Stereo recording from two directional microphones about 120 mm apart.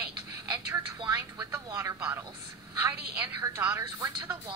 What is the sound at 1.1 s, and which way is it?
Speech, 25° right (ahead or behind).